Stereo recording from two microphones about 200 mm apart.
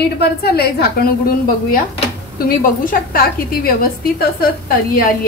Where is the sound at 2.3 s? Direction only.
45° left (ahead or behind).